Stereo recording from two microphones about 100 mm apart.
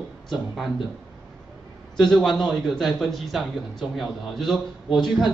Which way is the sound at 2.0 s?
5° left (ahead or behind).